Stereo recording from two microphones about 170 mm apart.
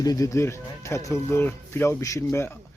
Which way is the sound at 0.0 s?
20° left (ahead or behind).